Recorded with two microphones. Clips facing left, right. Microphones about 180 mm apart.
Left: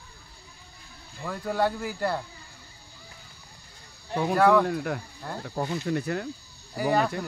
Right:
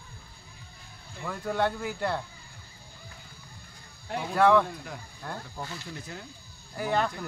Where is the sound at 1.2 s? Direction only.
5° left (ahead or behind).